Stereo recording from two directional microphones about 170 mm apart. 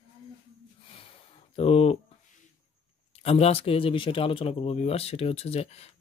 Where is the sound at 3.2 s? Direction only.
35° left (ahead or behind).